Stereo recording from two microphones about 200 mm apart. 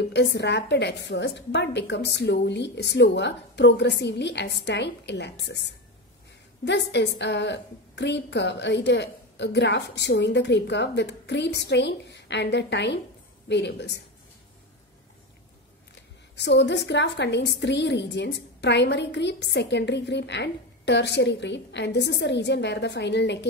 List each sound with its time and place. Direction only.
0.0 s a woman's voice: 55° left (ahead or behind)
6.9 s a woman's voice: 60° left (ahead or behind)
15.9 s a woman's voice: 60° left (ahead or behind)